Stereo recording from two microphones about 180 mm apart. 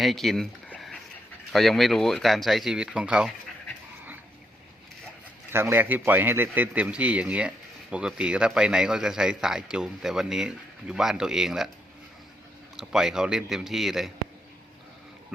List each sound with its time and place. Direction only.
0.0 s a sound: centre (ahead or behind)
1.5 s a man's voice: centre (ahead or behind)
5.5 s a man's voice: 10° right (ahead or behind)
12.7 s a man's voice: 5° right (ahead or behind)